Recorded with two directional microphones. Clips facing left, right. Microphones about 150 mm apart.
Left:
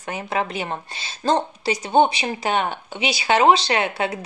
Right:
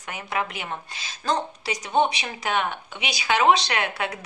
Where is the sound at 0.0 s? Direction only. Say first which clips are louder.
Left 4 dB; 30° left (ahead or behind).